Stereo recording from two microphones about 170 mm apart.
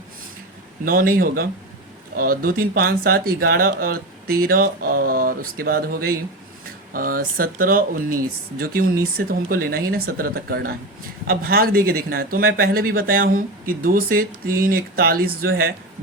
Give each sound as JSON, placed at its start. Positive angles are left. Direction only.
{"t": 0.9, "sound": "speech", "side_deg": -55}